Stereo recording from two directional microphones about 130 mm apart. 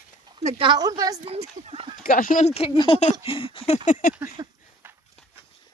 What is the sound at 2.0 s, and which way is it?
Speech, 90° left.